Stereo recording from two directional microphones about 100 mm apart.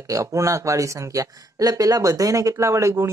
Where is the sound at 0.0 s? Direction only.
35° right (ahead or behind).